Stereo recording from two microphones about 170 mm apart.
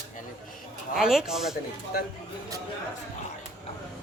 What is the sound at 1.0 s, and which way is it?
Speech, 5° right (ahead or behind).